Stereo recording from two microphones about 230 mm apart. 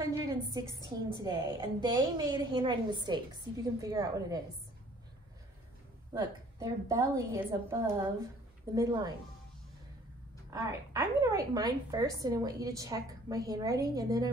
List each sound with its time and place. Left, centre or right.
0.0 s a sound: centre
0.7 s a woman's voice: centre
1.2 s a woman's voice: centre
6.1 s a woman's voice: centre
10.5 s a woman's voice: centre